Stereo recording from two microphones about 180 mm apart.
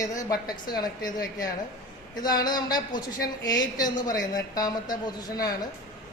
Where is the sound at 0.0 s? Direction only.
20° left (ahead or behind).